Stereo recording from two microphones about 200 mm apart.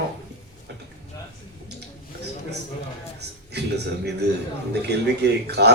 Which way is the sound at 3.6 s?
55° right (ahead or behind).